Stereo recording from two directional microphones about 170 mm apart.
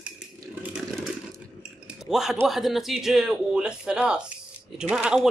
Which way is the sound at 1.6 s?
5° right (ahead or behind).